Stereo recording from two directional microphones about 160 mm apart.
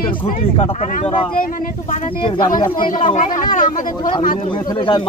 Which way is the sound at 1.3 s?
60° left (ahead or behind).